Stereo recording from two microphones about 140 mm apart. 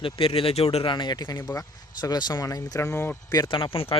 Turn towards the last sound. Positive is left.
turn(degrees=40)  # may be behind; listen again after turning